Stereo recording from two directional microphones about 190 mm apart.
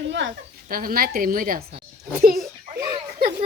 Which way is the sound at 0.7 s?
50° right (ahead or behind).